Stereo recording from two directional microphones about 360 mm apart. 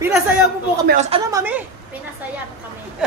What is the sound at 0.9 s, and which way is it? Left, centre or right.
Speech, centre.